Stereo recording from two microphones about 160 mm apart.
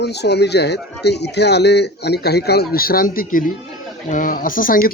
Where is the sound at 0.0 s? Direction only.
90° left.